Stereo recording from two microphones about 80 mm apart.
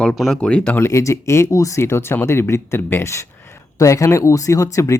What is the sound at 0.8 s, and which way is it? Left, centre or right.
Speech, left.